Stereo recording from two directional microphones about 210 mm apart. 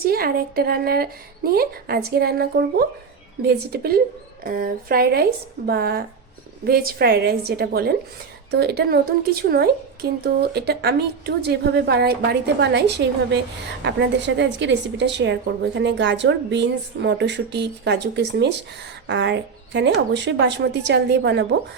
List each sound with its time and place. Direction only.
0.0 s a woman's voice: 45° right (ahead or behind)